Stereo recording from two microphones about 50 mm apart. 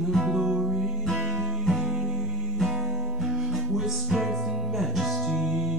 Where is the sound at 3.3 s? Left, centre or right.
Centre.